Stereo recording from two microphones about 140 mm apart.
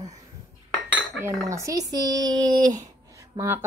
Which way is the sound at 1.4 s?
20° right (ahead or behind).